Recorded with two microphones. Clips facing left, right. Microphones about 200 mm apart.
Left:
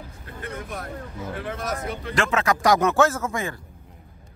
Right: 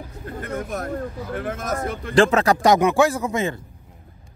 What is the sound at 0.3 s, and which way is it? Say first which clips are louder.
Speech: right 6 dB; 45° right (ahead or behind).